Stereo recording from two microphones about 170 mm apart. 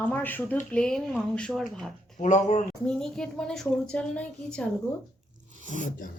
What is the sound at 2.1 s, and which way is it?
Speech, 45° left (ahead or behind).